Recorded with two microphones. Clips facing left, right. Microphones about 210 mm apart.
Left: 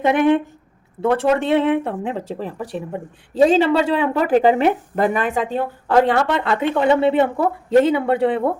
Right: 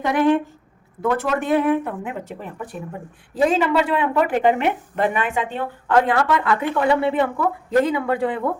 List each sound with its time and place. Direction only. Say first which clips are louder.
0.0 s a woman's voice: left 2 dB; 20° left (ahead or behind); by 5.6 s 40° left (ahead or behind)
6.1 s a woman's voice: left 1 dB; 25° left (ahead or behind)